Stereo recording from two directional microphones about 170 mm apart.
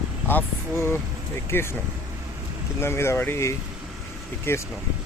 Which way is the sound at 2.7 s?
15° left (ahead or behind).